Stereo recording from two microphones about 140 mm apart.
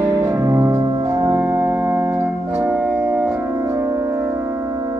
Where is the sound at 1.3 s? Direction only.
10° right (ahead or behind).